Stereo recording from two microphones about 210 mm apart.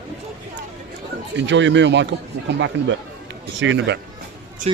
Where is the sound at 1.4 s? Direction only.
60° right (ahead or behind).